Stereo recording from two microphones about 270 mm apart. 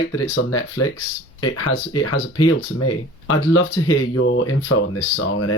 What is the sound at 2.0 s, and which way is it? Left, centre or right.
Speech, left.